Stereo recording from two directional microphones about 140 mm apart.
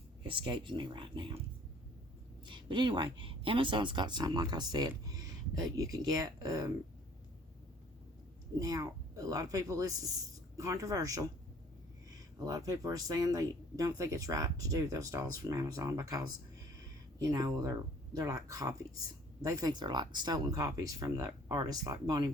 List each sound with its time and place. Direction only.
0.2 s speech: 35° right (ahead or behind)
2.5 s speech: 35° right (ahead or behind)
8.5 s speech: 25° right (ahead or behind)
12.5 s speech: 25° right (ahead or behind)